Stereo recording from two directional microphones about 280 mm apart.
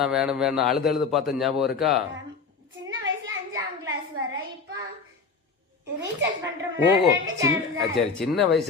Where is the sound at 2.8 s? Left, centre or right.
Right.